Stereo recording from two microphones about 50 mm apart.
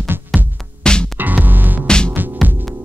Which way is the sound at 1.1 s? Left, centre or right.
Right.